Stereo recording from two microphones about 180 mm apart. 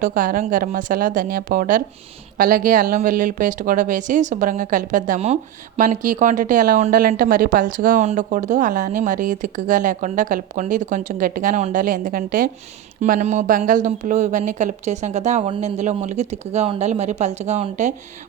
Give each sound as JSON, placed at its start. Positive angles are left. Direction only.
{"t": 0.0, "sound": "speech", "side_deg": -50}
{"t": 13.0, "sound": "speech", "side_deg": -40}